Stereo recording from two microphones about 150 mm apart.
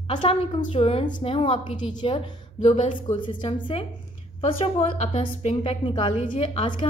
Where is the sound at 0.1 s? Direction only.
35° left (ahead or behind).